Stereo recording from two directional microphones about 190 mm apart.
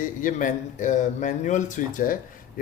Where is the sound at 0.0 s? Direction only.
45° left (ahead or behind).